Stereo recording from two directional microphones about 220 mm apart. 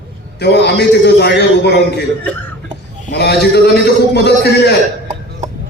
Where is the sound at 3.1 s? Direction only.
50° left (ahead or behind).